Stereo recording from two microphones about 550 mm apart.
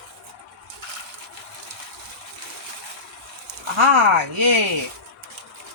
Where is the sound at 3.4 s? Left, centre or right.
Right.